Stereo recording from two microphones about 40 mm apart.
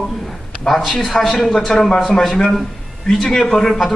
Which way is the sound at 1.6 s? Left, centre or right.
Centre.